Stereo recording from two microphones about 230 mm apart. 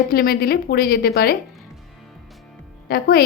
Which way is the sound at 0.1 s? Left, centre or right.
Left.